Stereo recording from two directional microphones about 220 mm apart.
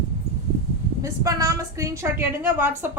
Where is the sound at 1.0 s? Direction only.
15° right (ahead or behind).